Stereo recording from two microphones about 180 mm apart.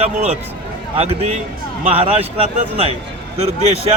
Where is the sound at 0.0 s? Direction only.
35° right (ahead or behind).